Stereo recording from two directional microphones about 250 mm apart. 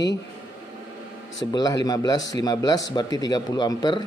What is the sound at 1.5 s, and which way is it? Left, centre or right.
Speech, centre.